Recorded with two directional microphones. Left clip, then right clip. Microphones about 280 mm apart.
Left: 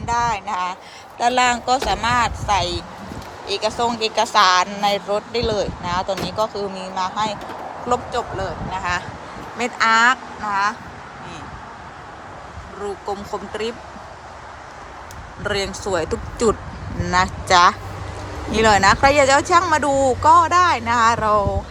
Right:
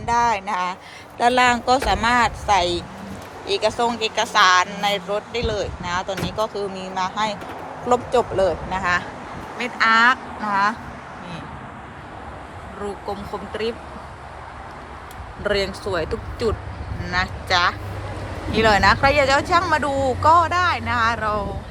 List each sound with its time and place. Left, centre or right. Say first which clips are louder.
0.0 s speech: right 1 dB; centre
13.1 s speech: left 2 dB; centre
15.4 s speech: even; centre